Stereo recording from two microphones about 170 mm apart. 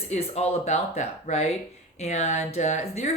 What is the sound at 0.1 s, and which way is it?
Speech, 40° left (ahead or behind).